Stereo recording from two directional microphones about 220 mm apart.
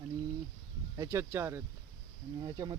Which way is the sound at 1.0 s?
10° right (ahead or behind).